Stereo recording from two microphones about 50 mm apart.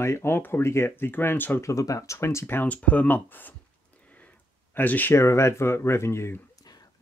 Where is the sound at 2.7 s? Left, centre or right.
Left.